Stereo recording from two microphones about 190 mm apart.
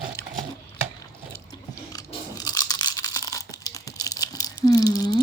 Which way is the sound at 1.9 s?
20° left (ahead or behind).